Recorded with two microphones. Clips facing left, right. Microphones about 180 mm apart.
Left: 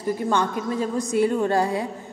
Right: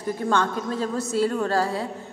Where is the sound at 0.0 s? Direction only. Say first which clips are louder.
Left 1 dB; 10° left (ahead or behind).